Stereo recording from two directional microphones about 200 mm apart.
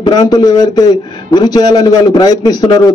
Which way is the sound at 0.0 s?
20° left (ahead or behind).